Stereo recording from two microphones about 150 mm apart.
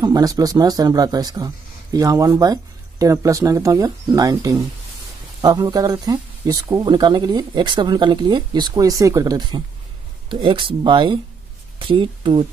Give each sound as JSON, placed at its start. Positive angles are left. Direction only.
{"t": 0.0, "sound": "speech", "side_deg": -25}